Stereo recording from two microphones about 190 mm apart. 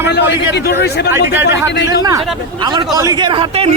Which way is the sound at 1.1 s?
10° right (ahead or behind).